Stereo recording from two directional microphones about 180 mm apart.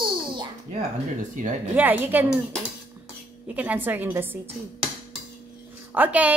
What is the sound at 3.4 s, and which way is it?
Speech, 10° right (ahead or behind).